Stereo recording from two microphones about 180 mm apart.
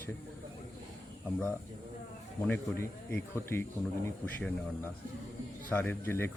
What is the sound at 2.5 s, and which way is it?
Speech, 10° left (ahead or behind).